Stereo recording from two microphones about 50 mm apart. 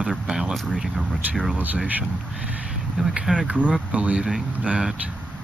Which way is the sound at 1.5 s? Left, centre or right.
Right.